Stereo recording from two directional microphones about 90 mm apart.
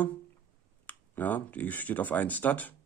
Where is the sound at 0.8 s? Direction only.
20° left (ahead or behind).